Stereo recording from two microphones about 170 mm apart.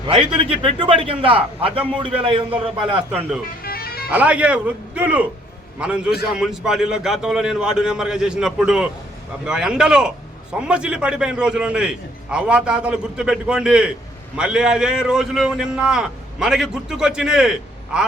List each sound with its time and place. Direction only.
0.3 s a man's voice: 30° right (ahead or behind)
3.6 s music: 60° left (ahead or behind)
4.1 s a man's voice: 10° right (ahead or behind)